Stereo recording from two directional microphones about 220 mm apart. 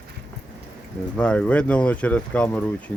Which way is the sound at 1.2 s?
5° left (ahead or behind).